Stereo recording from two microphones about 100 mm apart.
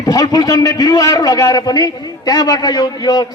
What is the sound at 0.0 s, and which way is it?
A man's voice, 40° left (ahead or behind).